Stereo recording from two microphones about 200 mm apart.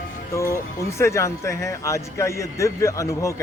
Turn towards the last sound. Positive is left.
turn(degrees=15)  # may be behind; listen again after turning